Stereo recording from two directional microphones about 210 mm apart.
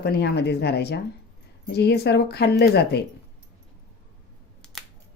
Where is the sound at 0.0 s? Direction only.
50° left (ahead or behind).